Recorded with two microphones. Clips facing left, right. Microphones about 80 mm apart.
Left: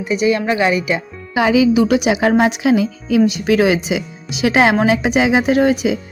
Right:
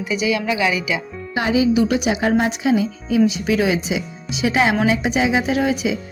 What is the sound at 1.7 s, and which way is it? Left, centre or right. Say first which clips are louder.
Speech: left 4 dB; left.